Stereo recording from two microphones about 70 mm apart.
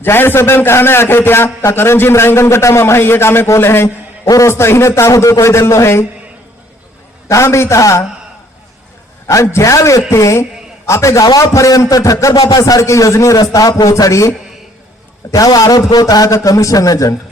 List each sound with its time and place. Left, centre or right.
0.0 s a man's voice: left
7.3 s speech: left
9.2 s speech: left
12.3 s a man's voice: left
15.2 s a man's voice: left